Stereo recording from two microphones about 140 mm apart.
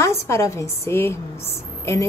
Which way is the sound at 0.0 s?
20° left (ahead or behind).